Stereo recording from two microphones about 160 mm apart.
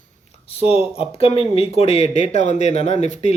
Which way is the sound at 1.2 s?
35° left (ahead or behind).